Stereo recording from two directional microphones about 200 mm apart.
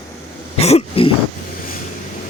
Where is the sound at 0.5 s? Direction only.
30° left (ahead or behind).